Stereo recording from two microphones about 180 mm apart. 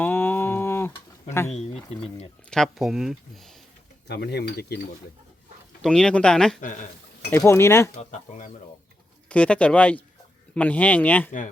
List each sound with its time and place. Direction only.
0.0 s a sound: 10° left (ahead or behind)
1.5 s speech: 35° left (ahead or behind)
2.5 s speech: centre (ahead or behind)
4.1 s speech: 65° left (ahead or behind)
5.8 s speech: 5° left (ahead or behind)
6.6 s speech: 45° left (ahead or behind)
7.3 s speech: 15° left (ahead or behind)
7.9 s speech: 40° left (ahead or behind)
9.3 s speech: 5° left (ahead or behind)